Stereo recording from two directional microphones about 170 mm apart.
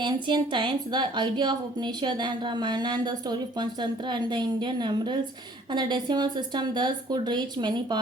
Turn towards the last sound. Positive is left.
turn(degrees=-25)  # may be behind; listen again after turning